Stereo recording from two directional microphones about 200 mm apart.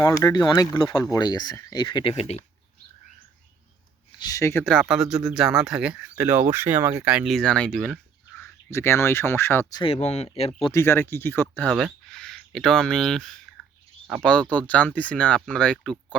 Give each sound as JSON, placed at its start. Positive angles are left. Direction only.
{"t": 0.0, "sound": "speech", "side_deg": 20}
{"t": 4.2, "sound": "speech", "side_deg": 15}
{"t": 10.7, "sound": "speech", "side_deg": 15}